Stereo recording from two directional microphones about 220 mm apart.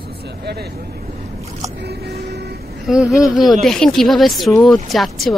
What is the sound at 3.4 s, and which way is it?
Speech, centre (ahead or behind).